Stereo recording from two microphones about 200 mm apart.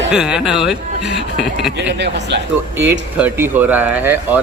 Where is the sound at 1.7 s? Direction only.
60° right (ahead or behind).